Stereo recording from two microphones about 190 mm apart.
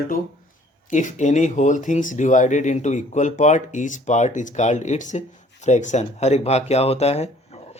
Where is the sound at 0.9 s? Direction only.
40° left (ahead or behind).